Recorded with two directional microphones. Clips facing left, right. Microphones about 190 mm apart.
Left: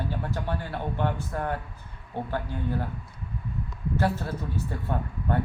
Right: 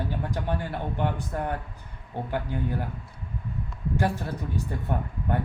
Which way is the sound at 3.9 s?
15° right (ahead or behind).